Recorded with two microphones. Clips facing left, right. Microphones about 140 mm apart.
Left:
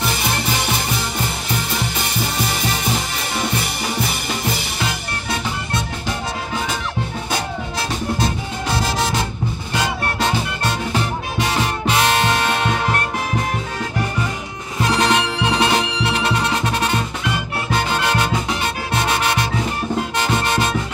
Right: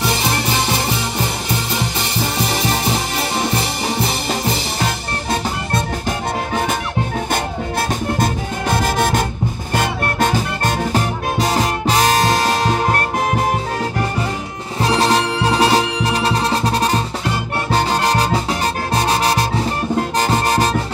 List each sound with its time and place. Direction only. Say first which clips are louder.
5.3 s music: right 4 dB; 50° right (ahead or behind)
8.2 s music: right 3 dB; 50° right (ahead or behind)
14.8 s music: right 2 dB; 30° right (ahead or behind)